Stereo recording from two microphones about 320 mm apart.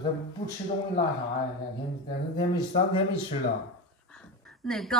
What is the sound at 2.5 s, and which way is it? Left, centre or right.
Speech, centre.